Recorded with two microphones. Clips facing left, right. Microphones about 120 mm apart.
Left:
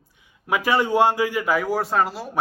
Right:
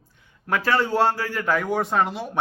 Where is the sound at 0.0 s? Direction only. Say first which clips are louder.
Right 2 dB; 10° left (ahead or behind).